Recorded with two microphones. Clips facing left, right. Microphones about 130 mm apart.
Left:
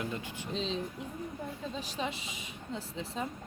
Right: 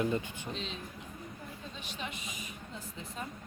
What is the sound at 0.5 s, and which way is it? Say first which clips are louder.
Speech: left 7 dB; 30° left (ahead or behind).